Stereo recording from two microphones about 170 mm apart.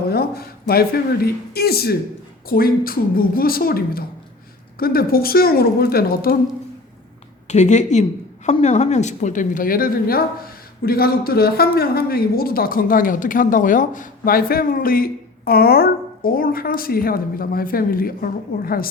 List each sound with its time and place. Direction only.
0.1 s a woman's voice: 65° left (ahead or behind)
7.4 s a woman's voice: 45° left (ahead or behind); by 18.9 s 60° left (ahead or behind)